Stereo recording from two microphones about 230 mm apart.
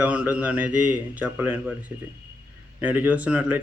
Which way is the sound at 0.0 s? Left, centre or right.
Centre.